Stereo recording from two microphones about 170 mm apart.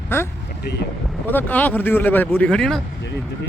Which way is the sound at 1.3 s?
10° left (ahead or behind).